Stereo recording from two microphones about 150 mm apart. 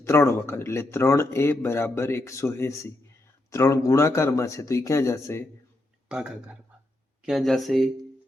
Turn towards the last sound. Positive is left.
turn(degrees=0)  # may be behind; listen again after turning